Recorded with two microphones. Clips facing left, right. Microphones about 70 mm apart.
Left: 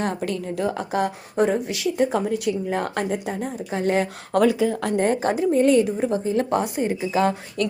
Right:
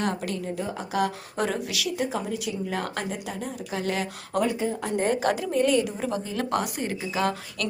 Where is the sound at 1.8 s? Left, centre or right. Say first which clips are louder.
Left 8 dB; left.